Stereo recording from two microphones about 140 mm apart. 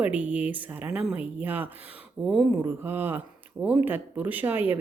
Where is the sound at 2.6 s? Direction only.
15° right (ahead or behind).